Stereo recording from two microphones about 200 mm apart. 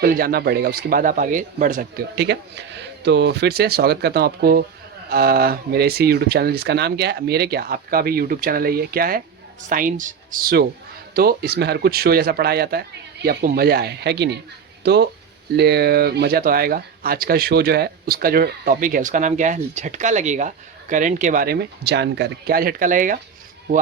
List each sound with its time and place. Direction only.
0.0 s speech: 45° right (ahead or behind)
2.1 s speech: 60° right (ahead or behind); by 23.2 s 40° right (ahead or behind)